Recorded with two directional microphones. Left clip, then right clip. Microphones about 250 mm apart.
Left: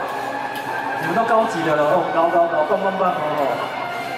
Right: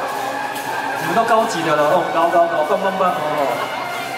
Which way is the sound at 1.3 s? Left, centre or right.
Centre.